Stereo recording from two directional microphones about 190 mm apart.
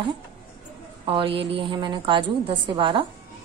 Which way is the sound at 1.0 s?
25° right (ahead or behind).